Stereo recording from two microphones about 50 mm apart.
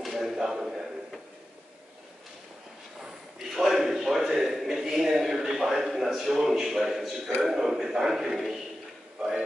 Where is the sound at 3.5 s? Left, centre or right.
Centre.